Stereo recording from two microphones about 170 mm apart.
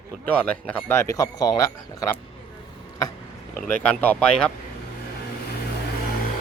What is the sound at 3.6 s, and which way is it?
Speech, 10° left (ahead or behind).